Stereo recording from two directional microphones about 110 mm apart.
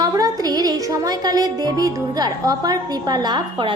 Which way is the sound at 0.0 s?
35° right (ahead or behind).